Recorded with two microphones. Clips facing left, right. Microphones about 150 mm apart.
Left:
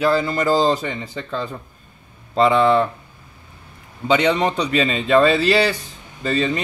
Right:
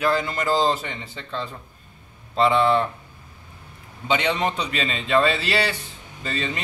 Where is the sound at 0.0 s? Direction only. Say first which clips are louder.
Left 5 dB; 35° left (ahead or behind).